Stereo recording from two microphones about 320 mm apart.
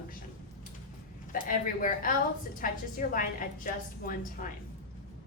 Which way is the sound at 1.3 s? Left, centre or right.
Left.